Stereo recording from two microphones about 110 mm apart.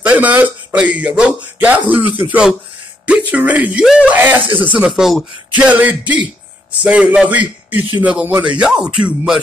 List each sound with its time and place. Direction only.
0.0 s speech: 15° right (ahead or behind)
3.8 s speech: 5° right (ahead or behind)
4.1 s speech: 15° right (ahead or behind)
4.7 s speech: 5° right (ahead or behind)
5.7 s speech: 15° right (ahead or behind)